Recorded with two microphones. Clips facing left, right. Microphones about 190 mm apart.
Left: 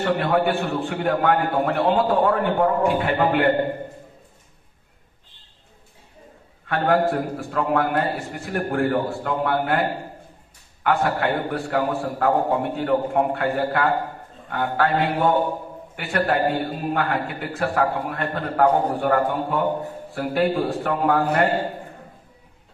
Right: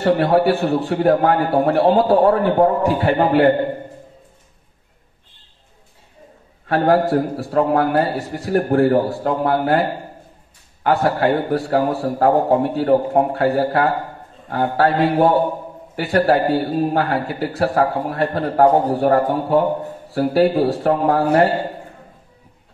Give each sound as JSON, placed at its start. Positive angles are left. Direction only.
{"t": 0.0, "sound": "a man's voice", "side_deg": -35}
{"t": 6.7, "sound": "a man's voice", "side_deg": -35}